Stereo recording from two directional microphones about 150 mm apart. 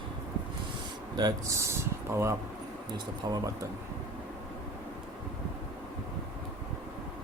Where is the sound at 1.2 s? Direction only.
25° right (ahead or behind).